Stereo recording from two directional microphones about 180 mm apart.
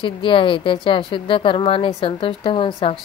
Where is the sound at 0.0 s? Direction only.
30° left (ahead or behind).